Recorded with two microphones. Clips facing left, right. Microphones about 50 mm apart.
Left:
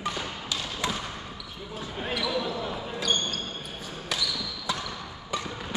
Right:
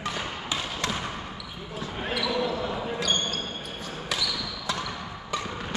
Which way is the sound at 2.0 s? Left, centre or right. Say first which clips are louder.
Right 2 dB; centre.